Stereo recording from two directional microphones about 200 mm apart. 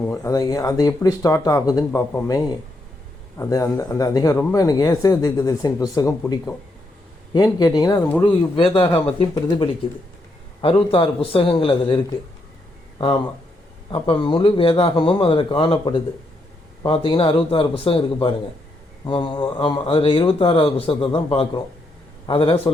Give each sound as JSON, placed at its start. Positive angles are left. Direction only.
{"t": 0.1, "sound": "a man's voice", "side_deg": 15}
{"t": 13.0, "sound": "a man's voice", "side_deg": 25}
{"t": 14.3, "sound": "a man's voice", "side_deg": 25}